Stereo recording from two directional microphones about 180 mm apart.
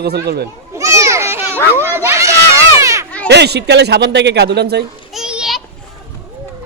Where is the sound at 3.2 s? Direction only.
70° right (ahead or behind).